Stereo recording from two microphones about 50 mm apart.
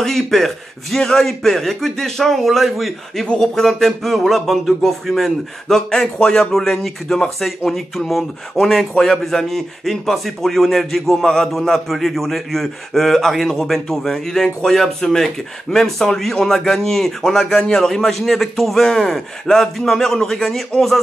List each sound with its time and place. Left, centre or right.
0.0 s a man's voice: centre